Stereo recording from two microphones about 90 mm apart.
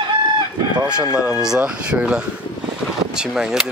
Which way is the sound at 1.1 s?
10° right (ahead or behind).